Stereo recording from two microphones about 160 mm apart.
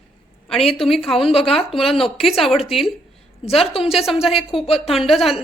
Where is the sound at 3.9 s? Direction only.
Centre (ahead or behind).